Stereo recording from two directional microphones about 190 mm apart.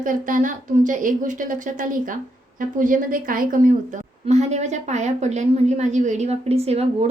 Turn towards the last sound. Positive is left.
turn(degrees=-30)  # may be behind; listen again after turning